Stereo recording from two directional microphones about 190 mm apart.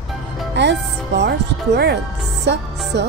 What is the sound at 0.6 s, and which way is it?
Speech, 65° right (ahead or behind).